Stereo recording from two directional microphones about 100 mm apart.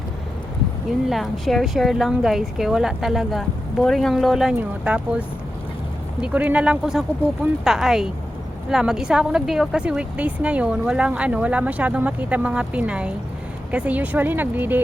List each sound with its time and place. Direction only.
1.1 s a woman's voice: centre (ahead or behind)
6.2 s a woman's voice: 15° right (ahead or behind)